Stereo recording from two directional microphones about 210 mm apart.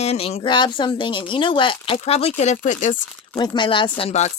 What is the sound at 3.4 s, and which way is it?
Speech, 20° left (ahead or behind).